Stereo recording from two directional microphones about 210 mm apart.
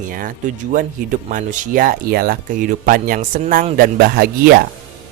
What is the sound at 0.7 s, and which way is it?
Speech, 40° right (ahead or behind).